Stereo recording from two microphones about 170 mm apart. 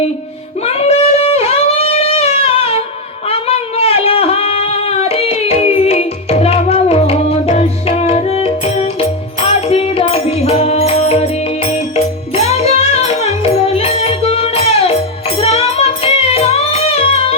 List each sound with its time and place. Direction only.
0.6 s a sound: 35° left (ahead or behind)
3.2 s singing: 35° left (ahead or behind)
12.4 s music: 40° left (ahead or behind)